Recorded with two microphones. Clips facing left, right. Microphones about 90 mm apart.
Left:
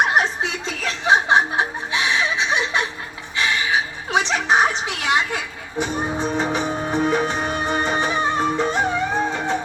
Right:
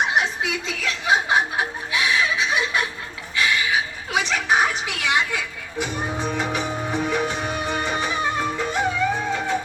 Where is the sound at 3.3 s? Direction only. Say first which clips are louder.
Even; 30° left (ahead or behind).